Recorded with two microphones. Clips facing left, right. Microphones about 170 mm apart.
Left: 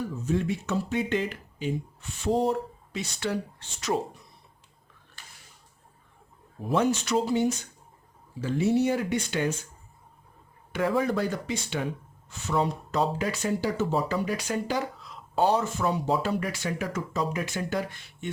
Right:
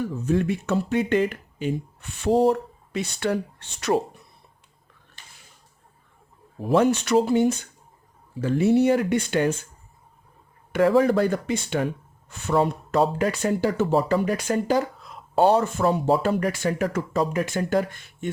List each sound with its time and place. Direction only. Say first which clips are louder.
0.3 s speech: right 5 dB; 65° right (ahead or behind)
6.6 s speech: right 5 dB; 65° right (ahead or behind)
10.7 s speech: right 7 dB; 65° right (ahead or behind)